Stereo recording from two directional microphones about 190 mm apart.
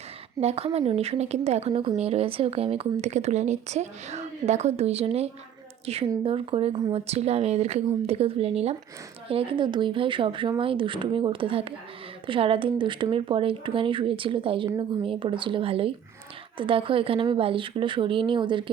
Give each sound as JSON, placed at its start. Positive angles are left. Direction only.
{"t": 0.3, "sound": "a woman's voice", "side_deg": -35}